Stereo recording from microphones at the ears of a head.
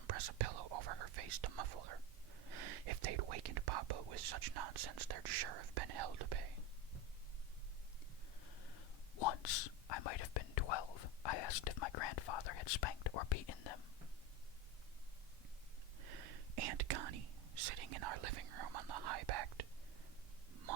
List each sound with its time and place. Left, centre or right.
0.0 s speech: right
8.4 s speech: left
16.0 s whispering: right